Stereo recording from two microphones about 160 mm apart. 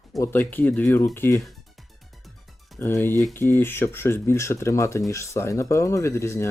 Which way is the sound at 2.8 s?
15° left (ahead or behind).